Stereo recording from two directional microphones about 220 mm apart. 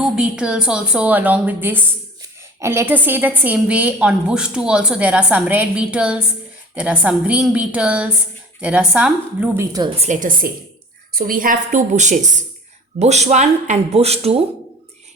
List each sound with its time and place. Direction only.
0.0 s a woman's voice: 5° right (ahead or behind)
9.7 s speech: 20° right (ahead or behind)
10.1 s a woman's voice: 35° right (ahead or behind)